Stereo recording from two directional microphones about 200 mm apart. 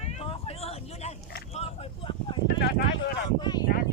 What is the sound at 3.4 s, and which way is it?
Speech, 20° left (ahead or behind).